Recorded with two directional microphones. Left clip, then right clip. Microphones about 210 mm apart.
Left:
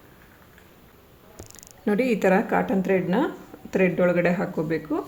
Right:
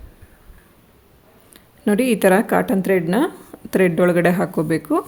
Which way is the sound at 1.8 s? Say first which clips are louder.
Right 5 dB; 40° right (ahead or behind).